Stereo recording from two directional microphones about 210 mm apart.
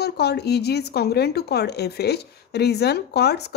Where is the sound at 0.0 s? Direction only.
50° left (ahead or behind).